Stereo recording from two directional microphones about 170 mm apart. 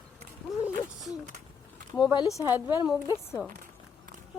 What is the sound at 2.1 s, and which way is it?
Speech, 20° left (ahead or behind).